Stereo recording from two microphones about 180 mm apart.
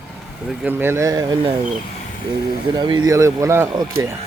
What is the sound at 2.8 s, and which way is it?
A man's voice, 25° right (ahead or behind).